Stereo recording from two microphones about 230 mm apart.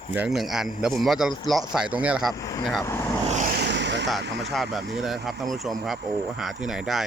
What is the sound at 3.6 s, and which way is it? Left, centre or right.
Vehicle, right.